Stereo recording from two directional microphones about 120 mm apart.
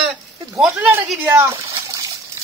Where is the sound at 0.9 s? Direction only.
20° right (ahead or behind).